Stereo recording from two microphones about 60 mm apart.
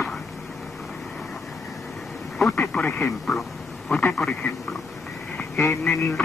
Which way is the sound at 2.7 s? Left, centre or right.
Centre.